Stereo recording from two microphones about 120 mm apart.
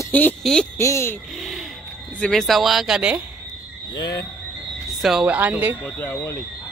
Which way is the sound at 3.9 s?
35° left (ahead or behind).